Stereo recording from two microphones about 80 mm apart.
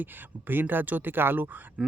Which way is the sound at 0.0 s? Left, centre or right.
Right.